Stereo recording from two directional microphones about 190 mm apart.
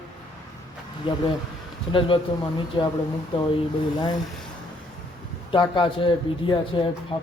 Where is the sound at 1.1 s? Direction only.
25° left (ahead or behind).